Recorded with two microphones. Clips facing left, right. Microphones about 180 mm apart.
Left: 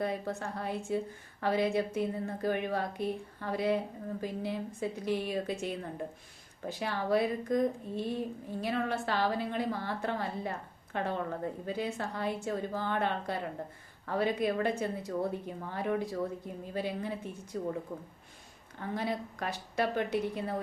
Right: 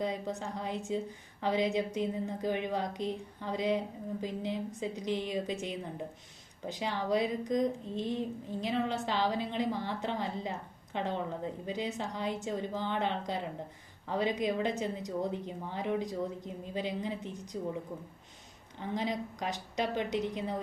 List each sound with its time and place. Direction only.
0.0 s a woman's voice: 15° right (ahead or behind)
18.8 s a woman's voice: 15° right (ahead or behind)